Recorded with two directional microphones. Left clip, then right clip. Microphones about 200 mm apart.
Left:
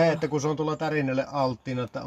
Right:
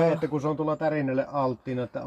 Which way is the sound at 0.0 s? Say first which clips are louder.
Left 1 dB; 15° left (ahead or behind).